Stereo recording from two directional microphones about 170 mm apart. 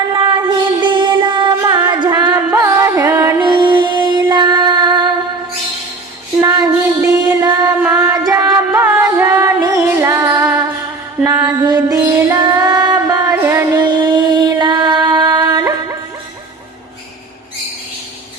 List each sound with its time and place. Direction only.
0.8 s music: 25° right (ahead or behind)
3.4 s a sound: 30° right (ahead or behind)
6.4 s child singing: 20° right (ahead or behind)
7.8 s music: 10° right (ahead or behind)
11.2 s mantra: 15° right (ahead or behind)
11.9 s female singing: 15° right (ahead or behind)